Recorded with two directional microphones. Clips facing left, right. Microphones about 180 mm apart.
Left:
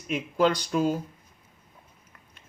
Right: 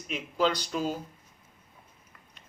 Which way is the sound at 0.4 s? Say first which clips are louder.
Left 4 dB; 50° left (ahead or behind).